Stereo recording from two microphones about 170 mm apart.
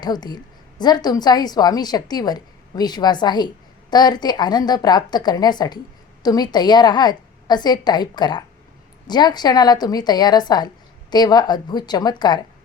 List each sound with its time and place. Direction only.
0.0 s a woman's voice: 25° left (ahead or behind)